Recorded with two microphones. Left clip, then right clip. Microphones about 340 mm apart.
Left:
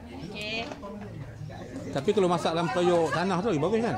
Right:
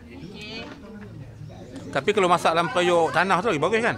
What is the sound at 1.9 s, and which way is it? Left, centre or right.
Speech, right.